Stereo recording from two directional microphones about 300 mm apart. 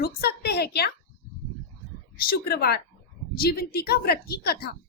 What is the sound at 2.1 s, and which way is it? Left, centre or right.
A woman's voice, left.